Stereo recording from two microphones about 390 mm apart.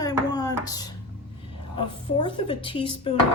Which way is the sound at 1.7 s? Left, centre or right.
Centre.